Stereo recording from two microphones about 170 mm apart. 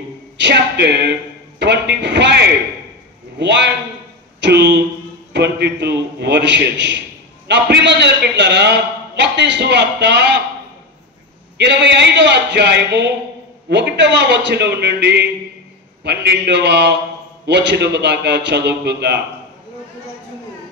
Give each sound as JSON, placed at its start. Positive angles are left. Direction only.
{"t": 0.4, "sound": "a man's voice", "side_deg": -90}
{"t": 11.5, "sound": "a man's voice", "side_deg": -90}